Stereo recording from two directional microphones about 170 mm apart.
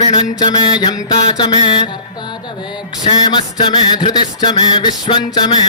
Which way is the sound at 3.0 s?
25° left (ahead or behind).